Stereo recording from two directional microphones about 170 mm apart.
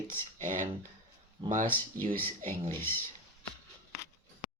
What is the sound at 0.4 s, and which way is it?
Speech, 45° right (ahead or behind).